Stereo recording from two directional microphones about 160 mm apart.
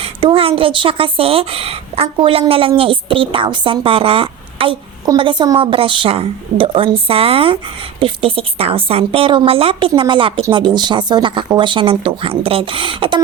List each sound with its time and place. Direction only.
0.0 s a woman's voice: 35° right (ahead or behind)